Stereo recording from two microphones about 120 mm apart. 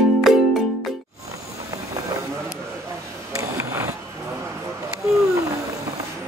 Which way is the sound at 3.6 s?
25° right (ahead or behind).